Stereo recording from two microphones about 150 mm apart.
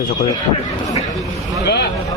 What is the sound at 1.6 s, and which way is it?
Speech, 90° left.